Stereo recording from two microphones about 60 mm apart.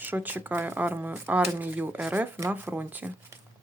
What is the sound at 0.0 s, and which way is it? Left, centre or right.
Speech, right.